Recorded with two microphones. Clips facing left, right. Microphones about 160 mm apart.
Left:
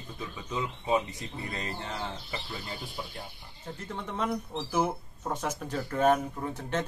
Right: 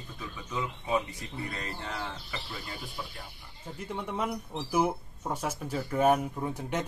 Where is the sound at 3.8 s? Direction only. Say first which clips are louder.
Right 1 dB; 10° right (ahead or behind).